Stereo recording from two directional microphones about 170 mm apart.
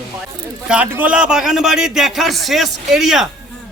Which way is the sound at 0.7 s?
10° right (ahead or behind).